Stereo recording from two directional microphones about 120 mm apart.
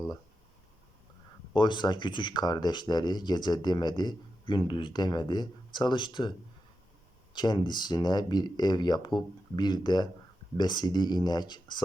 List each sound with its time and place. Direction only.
1.5 s speech: 40° left (ahead or behind)
7.3 s speech: 35° left (ahead or behind)